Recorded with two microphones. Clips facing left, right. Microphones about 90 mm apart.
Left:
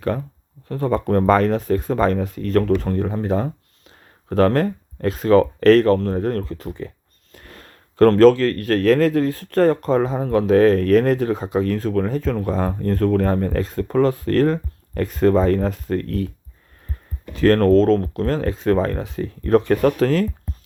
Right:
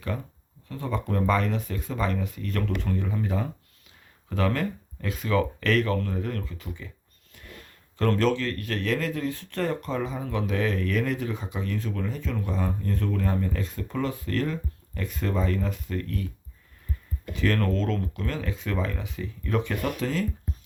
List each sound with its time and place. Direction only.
0.7 s speech: 45° left (ahead or behind)
7.3 s speech: 50° left (ahead or behind)